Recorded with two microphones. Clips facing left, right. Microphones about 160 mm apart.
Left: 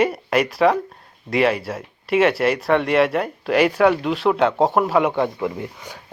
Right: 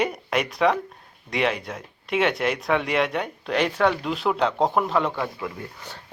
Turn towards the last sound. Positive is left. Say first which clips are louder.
# left 3 dB
turn(degrees=10)  # may be behind; listen again after turning